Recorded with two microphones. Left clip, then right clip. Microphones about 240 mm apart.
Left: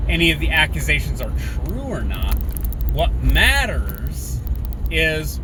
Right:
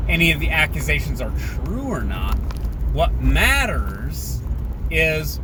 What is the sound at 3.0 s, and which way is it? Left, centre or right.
Speech, centre.